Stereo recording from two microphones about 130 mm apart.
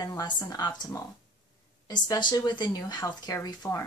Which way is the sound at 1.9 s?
35° left (ahead or behind).